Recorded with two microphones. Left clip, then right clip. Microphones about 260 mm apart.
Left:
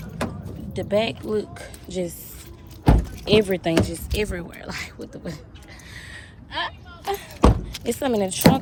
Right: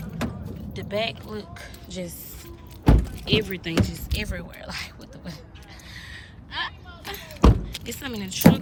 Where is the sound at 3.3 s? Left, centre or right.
Centre.